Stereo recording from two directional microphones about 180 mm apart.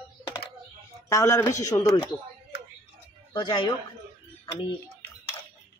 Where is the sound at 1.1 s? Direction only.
15° left (ahead or behind).